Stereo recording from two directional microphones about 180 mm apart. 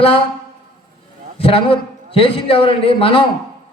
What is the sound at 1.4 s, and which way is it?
A man's voice, 30° left (ahead or behind).